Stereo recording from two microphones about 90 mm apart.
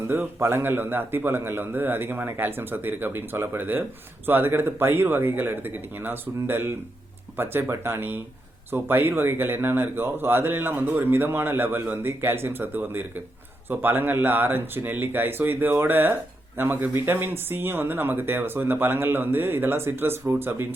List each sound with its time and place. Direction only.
0.1 s speech: 25° right (ahead or behind)